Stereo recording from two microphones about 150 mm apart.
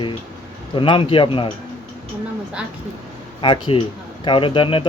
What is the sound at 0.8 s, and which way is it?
Speech, 35° left (ahead or behind).